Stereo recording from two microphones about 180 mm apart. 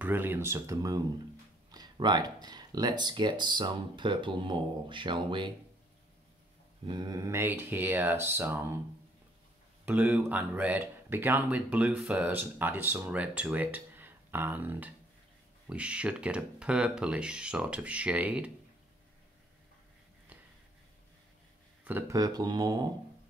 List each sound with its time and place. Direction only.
0.0 s speech: 10° right (ahead or behind); by 5.5 s 25° right (ahead or behind)
6.9 s speech: 20° right (ahead or behind)
9.8 s speech: 10° right (ahead or behind)
21.8 s speech: 15° right (ahead or behind)